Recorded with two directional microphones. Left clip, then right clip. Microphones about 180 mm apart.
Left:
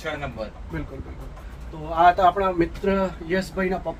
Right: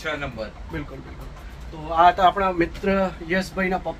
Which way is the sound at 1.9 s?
5° right (ahead or behind).